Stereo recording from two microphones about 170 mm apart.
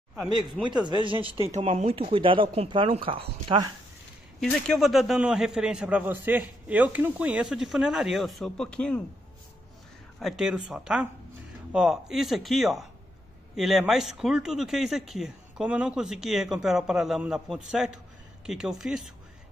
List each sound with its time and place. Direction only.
0.2 s speech: 25° right (ahead or behind)
4.4 s speech: 5° left (ahead or behind)
10.2 s speech: 5° right (ahead or behind)